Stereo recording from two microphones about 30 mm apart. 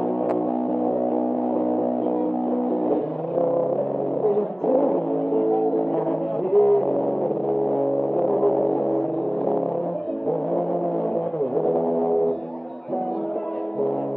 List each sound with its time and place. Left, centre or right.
1.1 s music: centre
4.3 s music: centre
11.6 s music: centre